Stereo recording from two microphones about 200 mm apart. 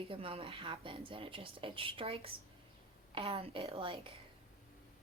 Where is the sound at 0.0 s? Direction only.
30° right (ahead or behind).